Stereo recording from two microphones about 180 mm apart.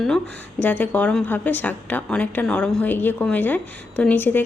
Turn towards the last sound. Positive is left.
turn(degrees=10)  # may be behind; listen again after turning